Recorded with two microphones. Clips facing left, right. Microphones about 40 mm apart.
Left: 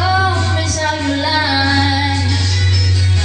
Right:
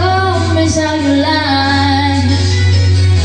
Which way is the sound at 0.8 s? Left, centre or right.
Centre.